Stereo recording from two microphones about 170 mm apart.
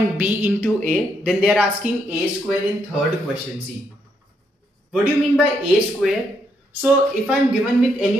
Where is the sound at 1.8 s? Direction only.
45° right (ahead or behind).